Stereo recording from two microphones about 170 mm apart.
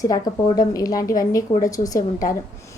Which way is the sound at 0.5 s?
20° left (ahead or behind).